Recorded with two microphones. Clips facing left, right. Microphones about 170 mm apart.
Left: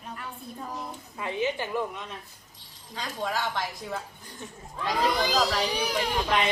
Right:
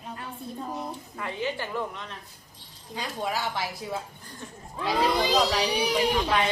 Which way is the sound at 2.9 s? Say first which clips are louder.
Even; 10° right (ahead or behind).